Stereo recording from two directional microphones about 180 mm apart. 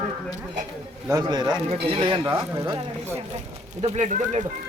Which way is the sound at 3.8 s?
40° right (ahead or behind).